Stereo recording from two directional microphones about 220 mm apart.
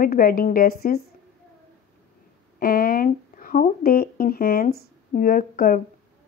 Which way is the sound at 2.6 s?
40° left (ahead or behind).